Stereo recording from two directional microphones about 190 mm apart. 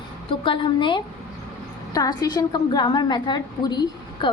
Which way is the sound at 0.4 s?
25° left (ahead or behind).